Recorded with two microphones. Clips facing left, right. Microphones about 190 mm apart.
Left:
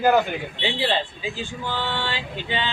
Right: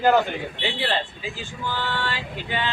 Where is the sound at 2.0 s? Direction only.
25° left (ahead or behind).